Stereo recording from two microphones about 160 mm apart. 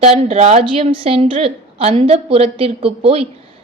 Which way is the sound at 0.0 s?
40° right (ahead or behind).